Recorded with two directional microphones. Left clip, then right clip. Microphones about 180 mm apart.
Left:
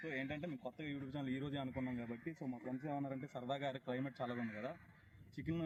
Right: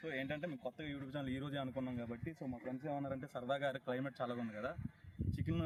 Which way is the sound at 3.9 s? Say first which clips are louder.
Right 2 dB; 30° right (ahead or behind).